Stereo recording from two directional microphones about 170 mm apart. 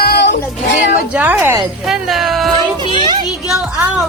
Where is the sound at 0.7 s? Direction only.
50° left (ahead or behind).